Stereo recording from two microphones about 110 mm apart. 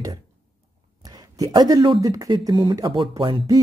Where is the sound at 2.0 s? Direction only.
35° right (ahead or behind).